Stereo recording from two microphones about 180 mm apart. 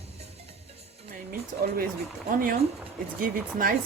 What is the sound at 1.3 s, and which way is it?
Speech, 55° right (ahead or behind).